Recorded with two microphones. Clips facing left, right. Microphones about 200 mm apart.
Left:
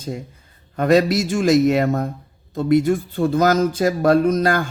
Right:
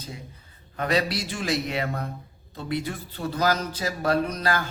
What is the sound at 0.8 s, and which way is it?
A man's voice, 45° left (ahead or behind).